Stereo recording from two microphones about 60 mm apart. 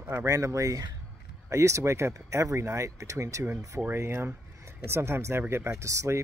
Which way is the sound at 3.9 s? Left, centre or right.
Right.